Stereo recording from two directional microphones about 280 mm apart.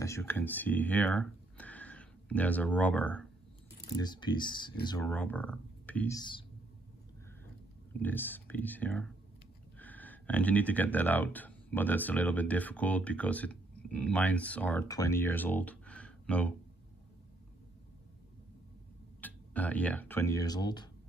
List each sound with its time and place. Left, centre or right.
0.0 s speech: centre
8.0 s speech: centre
19.2 s speech: centre